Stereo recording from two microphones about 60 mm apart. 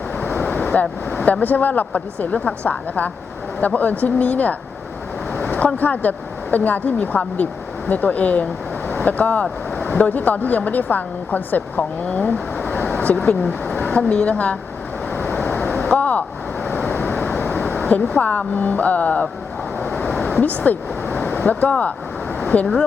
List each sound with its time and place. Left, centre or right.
0.3 s waves: left
1.2 s speech: left
5.4 s vehicle: left
5.7 s speech: left
8.9 s vehicle: left
9.9 s speech: left
15.1 s vehicle: left
15.7 s a sound: left
20.2 s speech: left
22.4 s a sound: left